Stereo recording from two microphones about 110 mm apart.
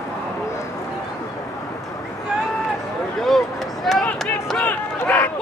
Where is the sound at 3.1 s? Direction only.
Centre (ahead or behind).